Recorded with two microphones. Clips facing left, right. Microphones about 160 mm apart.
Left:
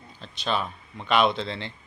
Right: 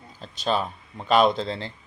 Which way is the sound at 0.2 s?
40° right (ahead or behind).